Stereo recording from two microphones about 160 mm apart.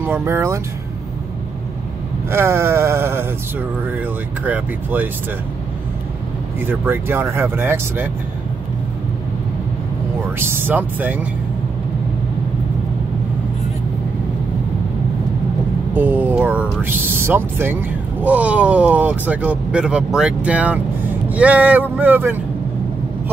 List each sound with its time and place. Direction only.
0.0 s speech: 15° right (ahead or behind)
2.3 s speech: 15° right (ahead or behind)
6.6 s speech: 15° right (ahead or behind)
10.4 s speech: 15° right (ahead or behind)
15.9 s speech: 10° right (ahead or behind)